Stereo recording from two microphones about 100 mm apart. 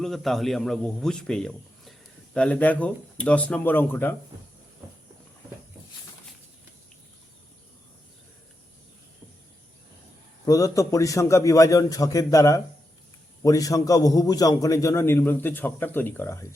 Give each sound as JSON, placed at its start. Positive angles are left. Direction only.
{"t": 0.0, "sound": "a man's voice", "side_deg": 0}
{"t": 10.4, "sound": "a man's voice", "side_deg": 35}